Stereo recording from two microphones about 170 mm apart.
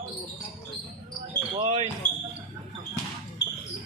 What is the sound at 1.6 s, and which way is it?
Basketball bounce, 30° right (ahead or behind).